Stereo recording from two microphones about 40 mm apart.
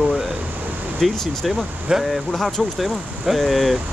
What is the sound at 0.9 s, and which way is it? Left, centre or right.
Speech, centre.